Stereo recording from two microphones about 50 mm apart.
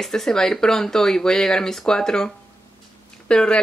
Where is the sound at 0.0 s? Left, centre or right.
Centre.